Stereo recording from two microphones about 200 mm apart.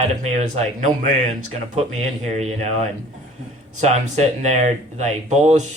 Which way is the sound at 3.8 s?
35° right (ahead or behind).